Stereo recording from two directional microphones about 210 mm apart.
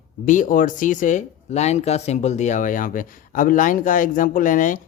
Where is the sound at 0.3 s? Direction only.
40° left (ahead or behind).